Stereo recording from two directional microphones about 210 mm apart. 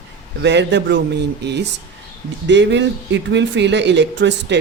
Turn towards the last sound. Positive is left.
turn(degrees=-55)  # may be behind; listen again after turning